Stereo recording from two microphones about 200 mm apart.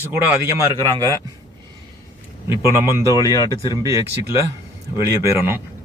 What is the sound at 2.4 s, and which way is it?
Speech, 15° right (ahead or behind).